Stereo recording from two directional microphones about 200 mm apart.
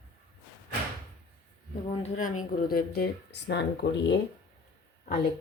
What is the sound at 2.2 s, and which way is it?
Speech, 40° left (ahead or behind).